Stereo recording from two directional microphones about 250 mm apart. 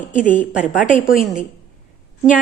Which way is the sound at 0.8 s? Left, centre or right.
Left.